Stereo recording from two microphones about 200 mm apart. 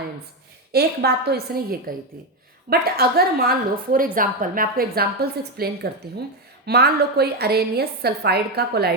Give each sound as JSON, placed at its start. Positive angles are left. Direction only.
{"t": 0.7, "sound": "a woman's voice", "side_deg": -55}